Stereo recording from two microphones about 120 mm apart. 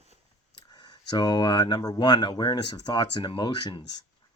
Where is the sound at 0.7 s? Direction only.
35° left (ahead or behind).